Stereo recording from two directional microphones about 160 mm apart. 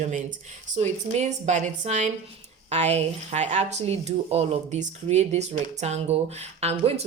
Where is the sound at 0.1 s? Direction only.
50° right (ahead or behind).